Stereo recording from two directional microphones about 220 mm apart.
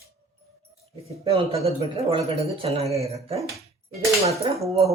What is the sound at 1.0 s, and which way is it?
Speech, 25° right (ahead or behind).